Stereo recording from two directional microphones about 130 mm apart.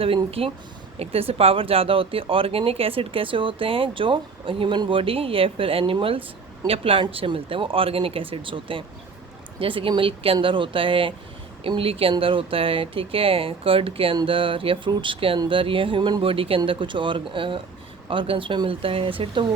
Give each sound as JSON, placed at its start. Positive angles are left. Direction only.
{"t": 0.0, "sound": "speech", "side_deg": -45}